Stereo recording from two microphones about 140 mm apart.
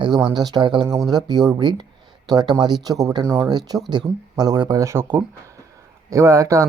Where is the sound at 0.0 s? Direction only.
30° right (ahead or behind).